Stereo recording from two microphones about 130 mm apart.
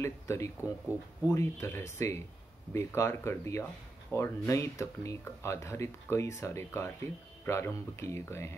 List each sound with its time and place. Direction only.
0.0 s speech: 20° left (ahead or behind)